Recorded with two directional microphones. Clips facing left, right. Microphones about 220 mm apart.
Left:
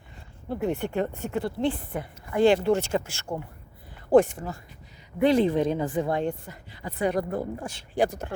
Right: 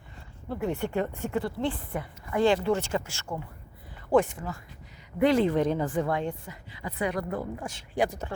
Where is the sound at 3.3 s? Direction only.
25° left (ahead or behind).